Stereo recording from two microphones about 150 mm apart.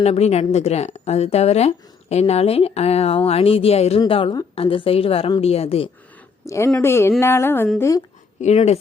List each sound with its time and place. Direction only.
0.0 s speech: 45° left (ahead or behind)
4.0 s a woman's voice: 30° left (ahead or behind)
6.4 s speech: 20° left (ahead or behind)
6.7 s a sound: 15° left (ahead or behind)
7.8 s a woman's voice: 20° left (ahead or behind)
8.4 s speech: 45° left (ahead or behind)